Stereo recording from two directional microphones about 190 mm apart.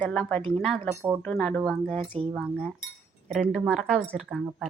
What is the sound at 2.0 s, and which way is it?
Speech, 30° right (ahead or behind).